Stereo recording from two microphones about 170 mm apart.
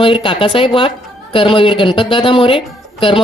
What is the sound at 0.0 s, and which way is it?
A woman's voice, 30° left (ahead or behind).